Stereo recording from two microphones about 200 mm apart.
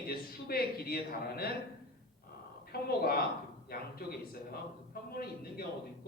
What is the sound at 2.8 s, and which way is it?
A man's voice, 50° left (ahead or behind).